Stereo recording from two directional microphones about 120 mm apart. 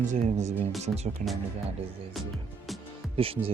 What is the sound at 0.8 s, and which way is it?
Speech, 65° right (ahead or behind).